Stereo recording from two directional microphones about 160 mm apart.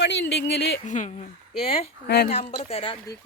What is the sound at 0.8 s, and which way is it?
Speech, 50° left (ahead or behind).